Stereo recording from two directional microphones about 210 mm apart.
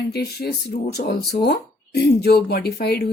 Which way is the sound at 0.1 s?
50° left (ahead or behind).